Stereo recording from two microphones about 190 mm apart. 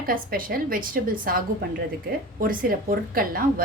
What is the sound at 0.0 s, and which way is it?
Speech, 50° right (ahead or behind).